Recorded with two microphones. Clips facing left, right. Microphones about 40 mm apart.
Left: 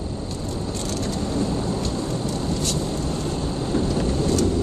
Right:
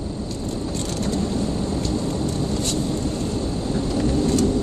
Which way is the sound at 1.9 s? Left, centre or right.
Centre.